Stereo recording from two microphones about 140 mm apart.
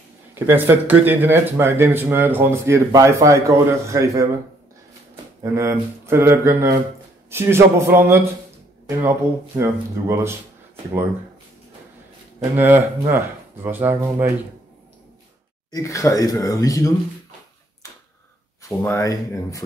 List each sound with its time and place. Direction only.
0.3 s speech: 15° right (ahead or behind)
5.4 s speech: 20° right (ahead or behind)
9.6 s speech: 20° right (ahead or behind)
12.5 s speech: 15° right (ahead or behind)
15.7 s speech: 20° left (ahead or behind)
18.6 s speech: 20° left (ahead or behind)